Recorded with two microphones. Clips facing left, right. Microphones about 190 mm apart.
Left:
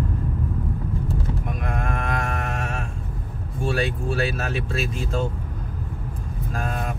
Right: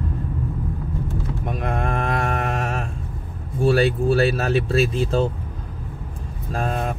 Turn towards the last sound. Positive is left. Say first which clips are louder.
# right 4 dB
turn(degrees=-30)  # may be behind; listen again after turning